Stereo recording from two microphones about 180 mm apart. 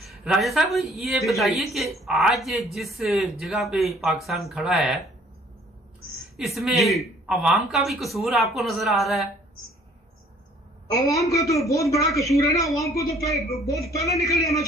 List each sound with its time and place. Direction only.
0.0 s speech: centre (ahead or behind)
6.3 s speech: centre (ahead or behind)
10.9 s a woman's voice: 20° left (ahead or behind)